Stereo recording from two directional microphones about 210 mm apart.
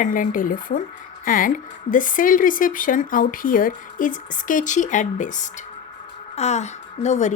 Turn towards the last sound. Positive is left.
turn(degrees=35)  # may be behind; listen again after turning